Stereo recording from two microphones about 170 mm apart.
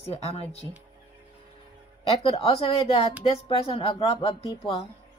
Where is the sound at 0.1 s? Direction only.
35° left (ahead or behind).